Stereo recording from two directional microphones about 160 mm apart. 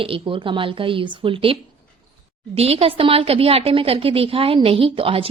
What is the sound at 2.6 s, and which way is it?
A woman's voice, 40° right (ahead or behind).